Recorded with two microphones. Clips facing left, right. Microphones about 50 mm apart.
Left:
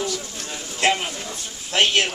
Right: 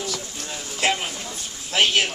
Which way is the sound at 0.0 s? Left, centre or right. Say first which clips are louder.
Left 3 dB; centre.